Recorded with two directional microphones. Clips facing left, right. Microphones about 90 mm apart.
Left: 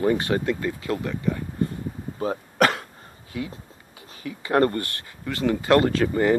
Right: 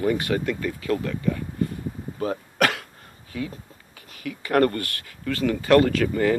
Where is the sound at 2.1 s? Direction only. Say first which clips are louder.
Left 1 dB; 30° left (ahead or behind).